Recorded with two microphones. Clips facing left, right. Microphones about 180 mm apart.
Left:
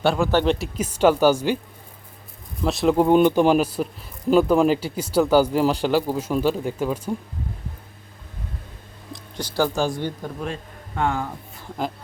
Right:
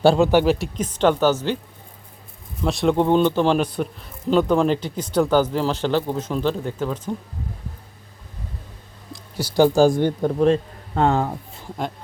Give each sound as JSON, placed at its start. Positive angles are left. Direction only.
{"t": 0.0, "sound": "speech", "side_deg": -30}
{"t": 0.3, "sound": "speech", "side_deg": -10}
{"t": 0.6, "sound": "speech", "side_deg": 10}
{"t": 2.6, "sound": "speech", "side_deg": 0}
{"t": 9.1, "sound": "a sound", "side_deg": -10}
{"t": 9.7, "sound": "speech", "side_deg": -40}
{"t": 10.0, "sound": "speech", "side_deg": -55}
{"t": 10.4, "sound": "speech", "side_deg": -30}